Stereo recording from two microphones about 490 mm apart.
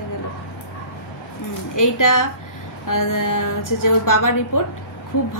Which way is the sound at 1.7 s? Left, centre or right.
Left.